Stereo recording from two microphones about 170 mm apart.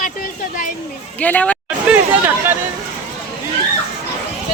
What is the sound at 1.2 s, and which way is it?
Speech, 10° left (ahead or behind).